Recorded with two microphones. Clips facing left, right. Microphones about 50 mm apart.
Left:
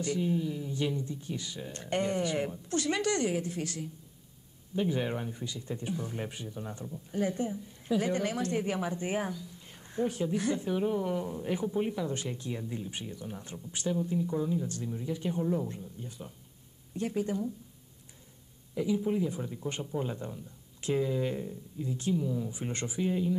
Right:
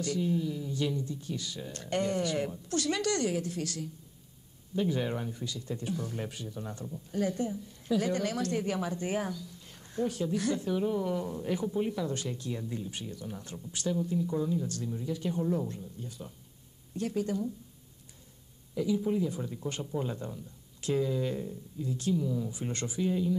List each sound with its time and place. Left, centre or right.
0.0 s a woman's voice: left
15.7 s a woman's voice: left
18.9 s a woman's voice: centre